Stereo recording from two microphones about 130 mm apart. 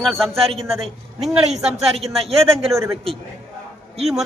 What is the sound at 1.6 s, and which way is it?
Speech, 55° right (ahead or behind).